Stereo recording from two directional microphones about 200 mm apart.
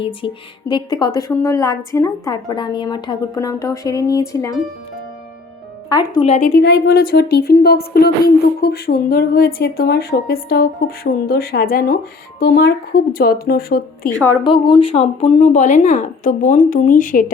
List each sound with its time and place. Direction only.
0.7 s a woman's voice: 20° left (ahead or behind)
5.9 s speech: 20° left (ahead or behind)
6.2 s speech: 35° left (ahead or behind)
6.5 s speech: 50° left (ahead or behind)
14.4 s speech: 25° left (ahead or behind); by 17.3 s 40° left (ahead or behind)